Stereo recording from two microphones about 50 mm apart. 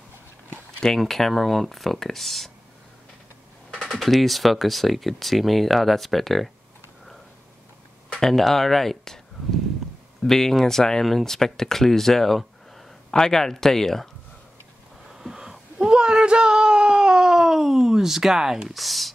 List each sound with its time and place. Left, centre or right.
0.9 s speech: centre
3.7 s a sound: centre
4.0 s speech: centre
8.1 s speech: centre
10.2 s speech: centre
15.1 s whimper: centre